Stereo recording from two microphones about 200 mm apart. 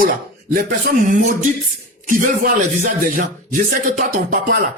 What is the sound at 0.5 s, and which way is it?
A man's voice, 45° right (ahead or behind).